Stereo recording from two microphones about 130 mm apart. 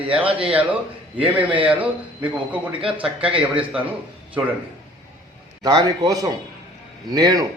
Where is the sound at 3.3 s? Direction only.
45° right (ahead or behind).